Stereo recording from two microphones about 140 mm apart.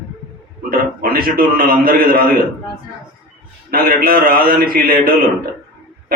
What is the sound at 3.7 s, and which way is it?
A man's voice, 90° right.